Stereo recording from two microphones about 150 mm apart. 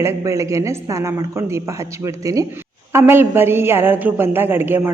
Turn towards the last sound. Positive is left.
turn(degrees=-15)  # may be behind; listen again after turning